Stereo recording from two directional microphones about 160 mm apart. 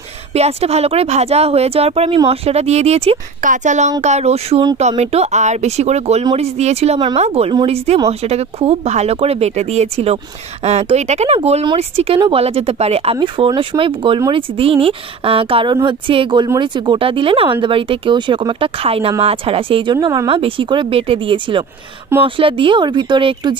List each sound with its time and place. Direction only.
0.3 s speech: 40° right (ahead or behind)